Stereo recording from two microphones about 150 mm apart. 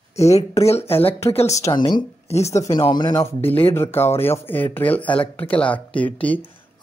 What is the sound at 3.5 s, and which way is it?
Speech, 15° left (ahead or behind).